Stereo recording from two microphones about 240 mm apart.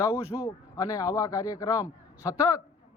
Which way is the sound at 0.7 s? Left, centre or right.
Centre.